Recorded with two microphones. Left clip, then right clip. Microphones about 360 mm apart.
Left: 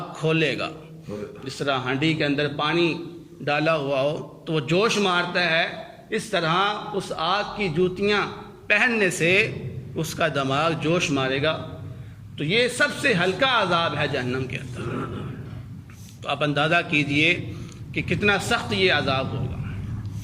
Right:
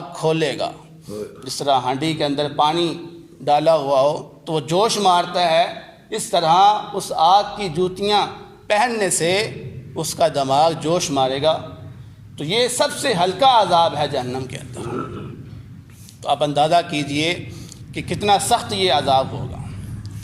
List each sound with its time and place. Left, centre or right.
0.1 s a man's voice: centre
16.2 s a man's voice: centre